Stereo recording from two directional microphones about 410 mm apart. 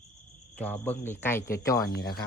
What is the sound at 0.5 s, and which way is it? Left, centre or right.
Speech, centre.